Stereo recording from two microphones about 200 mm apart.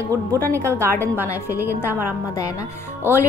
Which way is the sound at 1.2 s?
15° left (ahead or behind).